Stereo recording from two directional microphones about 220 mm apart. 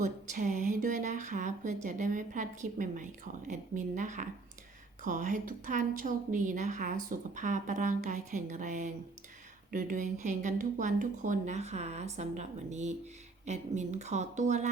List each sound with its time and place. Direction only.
0.0 s speech: 35° right (ahead or behind)